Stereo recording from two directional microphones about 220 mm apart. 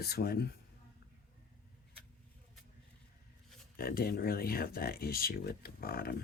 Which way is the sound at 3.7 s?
45° left (ahead or behind).